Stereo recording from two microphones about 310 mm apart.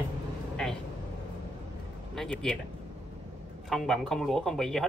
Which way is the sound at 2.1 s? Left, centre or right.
Centre.